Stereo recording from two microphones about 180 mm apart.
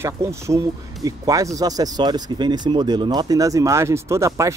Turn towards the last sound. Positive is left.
turn(degrees=-15)  # may be behind; listen again after turning